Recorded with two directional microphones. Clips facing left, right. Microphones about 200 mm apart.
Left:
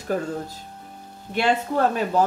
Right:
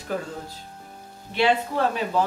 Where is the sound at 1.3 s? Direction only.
45° left (ahead or behind).